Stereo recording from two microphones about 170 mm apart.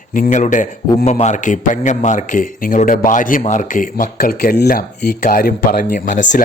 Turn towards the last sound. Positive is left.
turn(degrees=45)  # may be behind; listen again after turning